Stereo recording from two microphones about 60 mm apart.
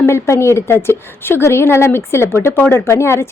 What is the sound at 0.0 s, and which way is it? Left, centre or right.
A woman's voice, left.